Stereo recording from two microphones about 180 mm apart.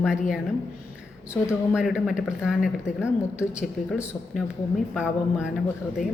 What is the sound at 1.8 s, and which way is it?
Speech, 5° right (ahead or behind).